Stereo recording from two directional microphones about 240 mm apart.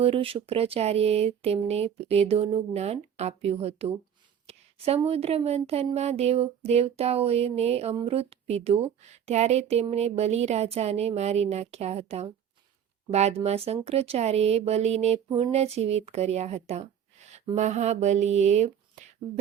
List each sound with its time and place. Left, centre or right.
0.0 s speech: right